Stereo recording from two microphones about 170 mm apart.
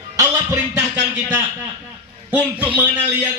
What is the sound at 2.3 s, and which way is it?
Speech, 10° right (ahead or behind).